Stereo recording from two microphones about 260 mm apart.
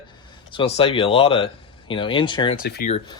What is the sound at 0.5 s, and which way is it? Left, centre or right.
Speech, left.